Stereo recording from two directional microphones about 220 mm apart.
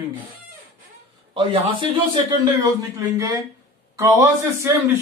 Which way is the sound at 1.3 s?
25° right (ahead or behind).